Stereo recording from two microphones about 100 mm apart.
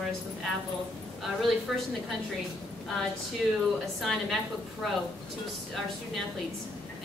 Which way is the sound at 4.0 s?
Centre (ahead or behind).